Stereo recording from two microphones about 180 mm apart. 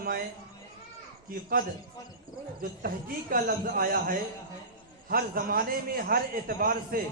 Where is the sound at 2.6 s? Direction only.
50° right (ahead or behind).